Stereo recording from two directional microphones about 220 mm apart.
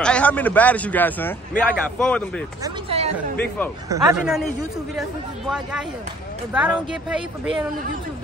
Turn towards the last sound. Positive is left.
turn(degrees=-5)  # may be behind; listen again after turning